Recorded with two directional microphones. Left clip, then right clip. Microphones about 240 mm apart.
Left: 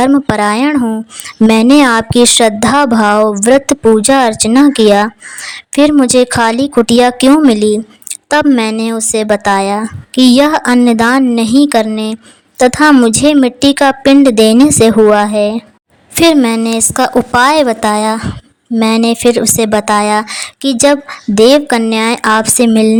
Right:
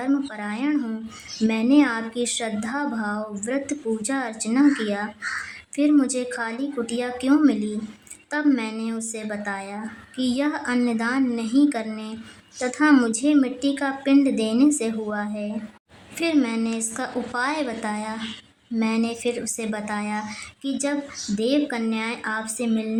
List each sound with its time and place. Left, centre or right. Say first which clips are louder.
0.0 s speech: left 17 dB; left